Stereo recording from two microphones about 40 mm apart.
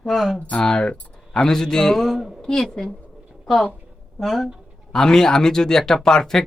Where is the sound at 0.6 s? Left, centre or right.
Centre.